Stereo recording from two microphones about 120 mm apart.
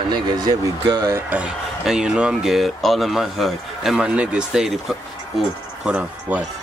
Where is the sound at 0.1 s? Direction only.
35° right (ahead or behind).